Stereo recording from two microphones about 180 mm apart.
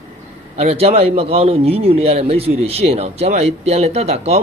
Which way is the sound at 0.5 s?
35° right (ahead or behind).